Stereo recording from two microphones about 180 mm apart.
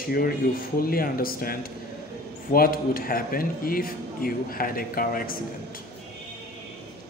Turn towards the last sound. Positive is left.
turn(degrees=50)  # may be behind; listen again after turning